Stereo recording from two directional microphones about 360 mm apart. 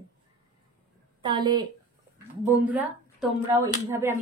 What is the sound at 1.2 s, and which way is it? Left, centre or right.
Speech, centre.